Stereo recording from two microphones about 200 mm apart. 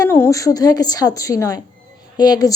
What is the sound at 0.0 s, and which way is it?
A woman's voice, 15° left (ahead or behind).